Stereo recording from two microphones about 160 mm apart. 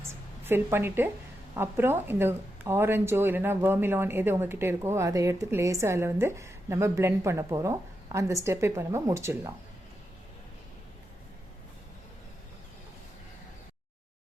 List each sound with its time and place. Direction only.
0.1 s a woman's voice: 15° right (ahead or behind)